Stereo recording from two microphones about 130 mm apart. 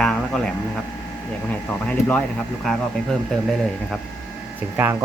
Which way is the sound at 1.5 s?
10° left (ahead or behind).